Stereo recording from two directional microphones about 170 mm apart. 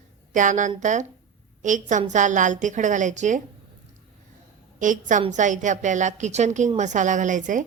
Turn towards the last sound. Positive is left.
turn(degrees=-50)  # may be behind; listen again after turning